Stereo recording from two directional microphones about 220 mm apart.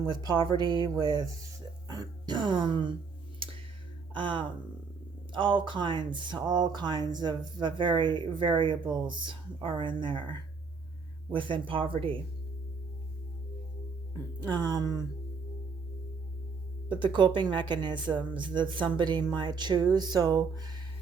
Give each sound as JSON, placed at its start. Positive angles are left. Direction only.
{"t": 0.0, "sound": "speech", "side_deg": -20}
{"t": 4.1, "sound": "speech", "side_deg": -20}
{"t": 14.4, "sound": "speech", "side_deg": -20}
{"t": 16.9, "sound": "speech", "side_deg": -20}